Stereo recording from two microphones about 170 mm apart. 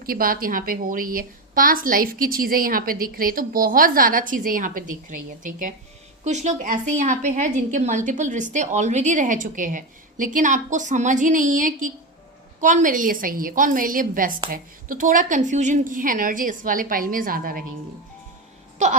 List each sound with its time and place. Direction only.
0.0 s a woman's voice: 60° right (ahead or behind)
18.8 s a woman's voice: 45° right (ahead or behind)